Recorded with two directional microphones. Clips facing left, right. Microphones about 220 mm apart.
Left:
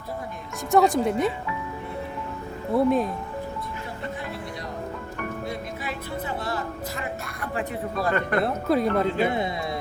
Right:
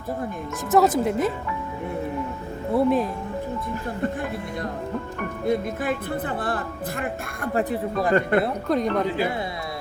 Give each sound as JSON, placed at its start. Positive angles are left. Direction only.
{"t": 0.7, "sound": "speech", "side_deg": 0}
{"t": 2.7, "sound": "speech", "side_deg": 0}
{"t": 5.5, "sound": "speech", "side_deg": -50}
{"t": 7.5, "sound": "speech", "side_deg": -35}
{"t": 8.4, "sound": "speech", "side_deg": 5}